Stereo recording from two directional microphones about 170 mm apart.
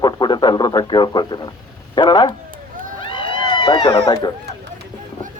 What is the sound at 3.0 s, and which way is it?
Run, 30° left (ahead or behind).